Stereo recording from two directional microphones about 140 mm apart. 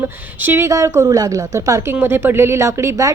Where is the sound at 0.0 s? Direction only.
15° right (ahead or behind).